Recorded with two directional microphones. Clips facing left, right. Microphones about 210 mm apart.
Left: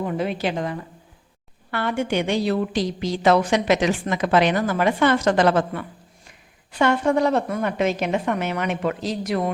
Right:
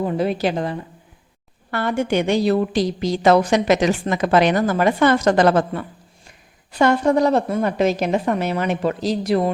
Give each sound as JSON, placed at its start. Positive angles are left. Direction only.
{"t": 0.0, "sound": "a woman's voice", "side_deg": -35}